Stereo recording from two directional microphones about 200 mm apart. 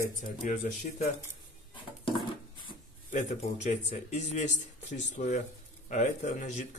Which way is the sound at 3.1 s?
35° left (ahead or behind).